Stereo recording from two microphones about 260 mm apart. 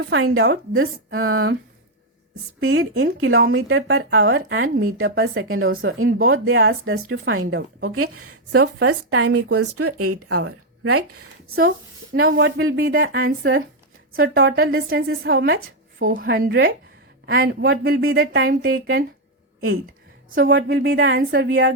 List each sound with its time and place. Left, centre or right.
0.0 s speech: right
0.9 s speech: right
1.3 s speech: right
2.6 s speech: right
7.4 s speech: right
7.9 s speech: right
9.2 s speech: right
12.7 s speech: right
18.2 s speech: right
20.3 s speech: right